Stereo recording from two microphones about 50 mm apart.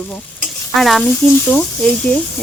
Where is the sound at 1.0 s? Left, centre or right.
Left.